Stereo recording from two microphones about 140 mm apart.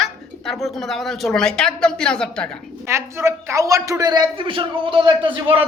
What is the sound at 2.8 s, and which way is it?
A man's voice, 20° right (ahead or behind).